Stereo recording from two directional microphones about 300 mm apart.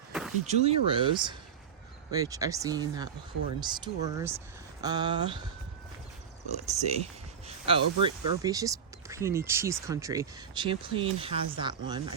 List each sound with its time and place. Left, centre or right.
0.1 s door: centre
0.4 s speech: right
2.0 s speech: centre
6.7 s speech: right